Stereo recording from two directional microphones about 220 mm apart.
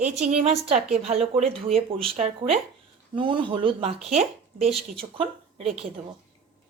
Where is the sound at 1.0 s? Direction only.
30° right (ahead or behind).